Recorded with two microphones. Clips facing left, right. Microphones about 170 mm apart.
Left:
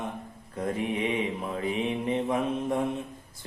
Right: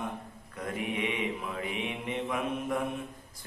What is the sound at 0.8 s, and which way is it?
Mantra, 35° left (ahead or behind).